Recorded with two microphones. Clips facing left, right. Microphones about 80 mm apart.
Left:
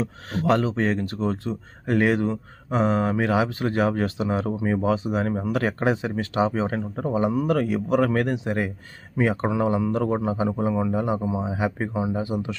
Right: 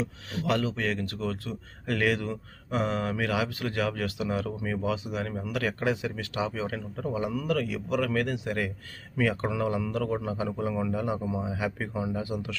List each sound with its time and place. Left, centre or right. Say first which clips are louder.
0.0 s a man's voice: left 6 dB; left